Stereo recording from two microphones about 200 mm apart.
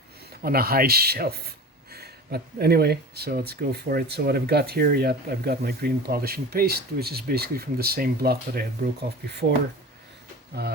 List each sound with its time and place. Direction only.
0.4 s speech: 50° right (ahead or behind)
10.6 s speech: 55° right (ahead or behind)